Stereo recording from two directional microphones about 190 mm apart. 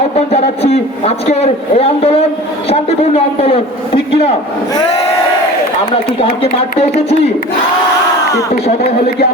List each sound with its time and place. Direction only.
0.3 s a man's voice: 35° left (ahead or behind)
6.1 s a man's voice: 30° left (ahead or behind)